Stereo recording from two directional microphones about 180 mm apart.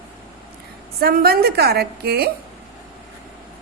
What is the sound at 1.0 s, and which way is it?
A woman's voice, 55° right (ahead or behind).